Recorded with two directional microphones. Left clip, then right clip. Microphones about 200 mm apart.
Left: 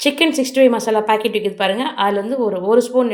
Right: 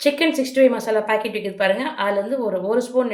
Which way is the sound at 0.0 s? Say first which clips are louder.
Left 3 dB; 35° left (ahead or behind).